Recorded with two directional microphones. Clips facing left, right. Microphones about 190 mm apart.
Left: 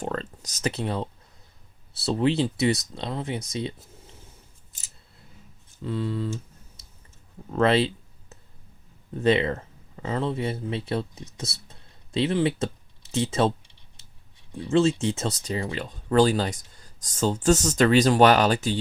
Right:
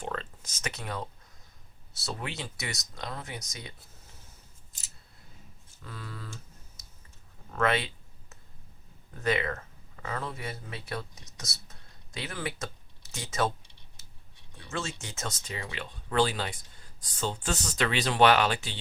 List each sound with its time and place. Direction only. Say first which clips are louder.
0.0 s speech: left 6 dB; 40° left (ahead or behind)
2.0 s speech: left 15 dB; 30° left (ahead or behind)
5.8 s speech: left 15 dB; 25° left (ahead or behind)
7.5 s clicking: left 7 dB; 30° left (ahead or behind)
9.1 s speech: left 8 dB; 25° left (ahead or behind)
14.6 s speech: left 16 dB; 30° left (ahead or behind)